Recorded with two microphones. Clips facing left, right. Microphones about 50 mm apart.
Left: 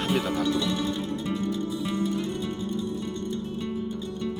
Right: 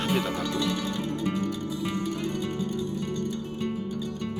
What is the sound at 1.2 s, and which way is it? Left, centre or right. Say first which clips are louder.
Music: right 3 dB; right.